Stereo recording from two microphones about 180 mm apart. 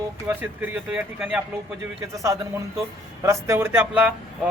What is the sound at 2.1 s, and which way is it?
Speech, 15° right (ahead or behind).